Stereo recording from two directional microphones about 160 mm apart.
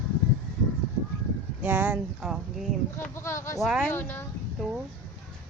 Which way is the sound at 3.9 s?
15° left (ahead or behind).